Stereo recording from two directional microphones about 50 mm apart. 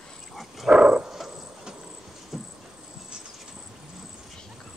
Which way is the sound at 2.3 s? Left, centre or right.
Centre.